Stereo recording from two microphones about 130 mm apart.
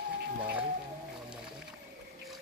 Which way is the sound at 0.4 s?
10° right (ahead or behind).